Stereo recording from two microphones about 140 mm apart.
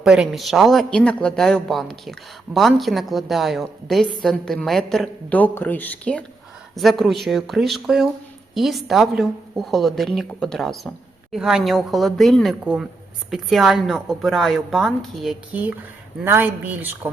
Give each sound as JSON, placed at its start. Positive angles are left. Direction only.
{"t": 0.0, "sound": "a woman's voice", "side_deg": -5}